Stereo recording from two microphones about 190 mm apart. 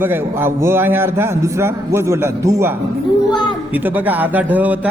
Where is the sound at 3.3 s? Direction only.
25° left (ahead or behind).